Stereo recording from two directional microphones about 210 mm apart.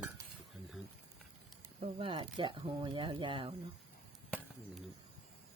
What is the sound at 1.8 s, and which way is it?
Speech, 25° right (ahead or behind).